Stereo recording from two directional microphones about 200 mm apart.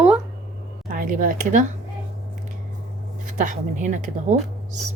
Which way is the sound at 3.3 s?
40° right (ahead or behind).